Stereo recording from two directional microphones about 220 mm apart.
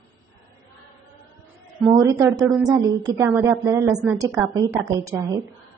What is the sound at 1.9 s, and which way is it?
A woman's voice, 15° right (ahead or behind).